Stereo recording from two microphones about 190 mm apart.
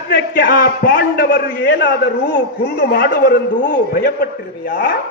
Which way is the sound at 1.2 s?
60° left (ahead or behind).